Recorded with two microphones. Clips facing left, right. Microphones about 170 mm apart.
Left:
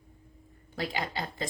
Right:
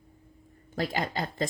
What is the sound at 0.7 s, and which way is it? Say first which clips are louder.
Speech: right 3 dB; 45° right (ahead or behind).